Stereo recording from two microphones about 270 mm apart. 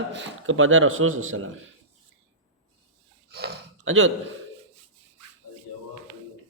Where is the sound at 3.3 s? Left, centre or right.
Right.